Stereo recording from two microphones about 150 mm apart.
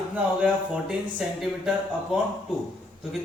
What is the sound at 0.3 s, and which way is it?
Speech, 10° right (ahead or behind).